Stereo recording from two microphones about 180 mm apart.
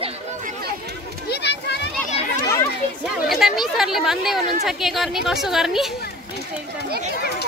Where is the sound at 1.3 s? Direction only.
70° left (ahead or behind).